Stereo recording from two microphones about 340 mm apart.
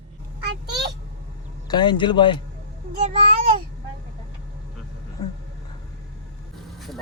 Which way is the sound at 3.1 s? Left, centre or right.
Centre.